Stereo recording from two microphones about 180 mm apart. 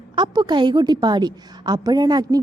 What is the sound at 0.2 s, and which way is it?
A woman's voice, 25° right (ahead or behind).